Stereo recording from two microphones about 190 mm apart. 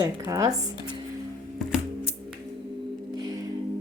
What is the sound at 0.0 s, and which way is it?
Speech, 15° right (ahead or behind).